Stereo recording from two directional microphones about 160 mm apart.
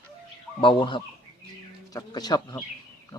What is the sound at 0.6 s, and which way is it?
Speech, 30° left (ahead or behind).